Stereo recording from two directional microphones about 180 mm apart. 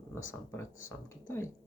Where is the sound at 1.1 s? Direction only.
15° left (ahead or behind).